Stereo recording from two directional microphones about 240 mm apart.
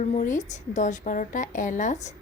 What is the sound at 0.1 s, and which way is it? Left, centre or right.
A woman's voice, left.